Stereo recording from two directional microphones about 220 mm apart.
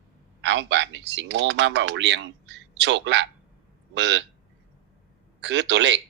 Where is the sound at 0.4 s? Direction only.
55° right (ahead or behind).